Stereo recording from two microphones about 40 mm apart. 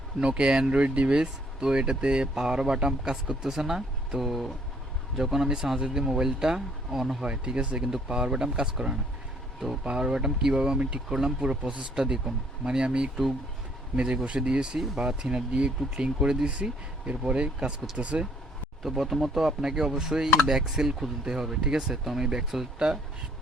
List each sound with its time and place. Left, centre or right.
0.2 s speech: right
0.7 s speech: right
1.1 s speech: centre
7.3 s speech: right
11.9 s speech: centre
16.1 s speech: centre
18.9 s speech: centre